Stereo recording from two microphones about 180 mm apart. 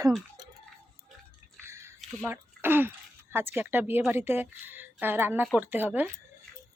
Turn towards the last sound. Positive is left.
turn(degrees=-10)  # may be behind; listen again after turning